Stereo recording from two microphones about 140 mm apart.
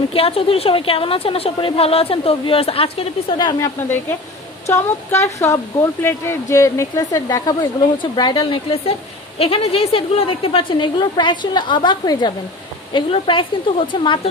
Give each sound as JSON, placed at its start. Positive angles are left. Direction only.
{"t": 0.1, "sound": "a woman's voice", "side_deg": 45}
{"t": 3.3, "sound": "a woman's voice", "side_deg": 30}